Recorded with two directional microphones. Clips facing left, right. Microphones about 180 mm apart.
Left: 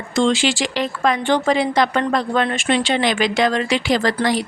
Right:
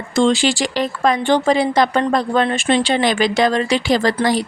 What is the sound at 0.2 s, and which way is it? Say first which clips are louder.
A woman's voice: right 2 dB; 40° right (ahead or behind).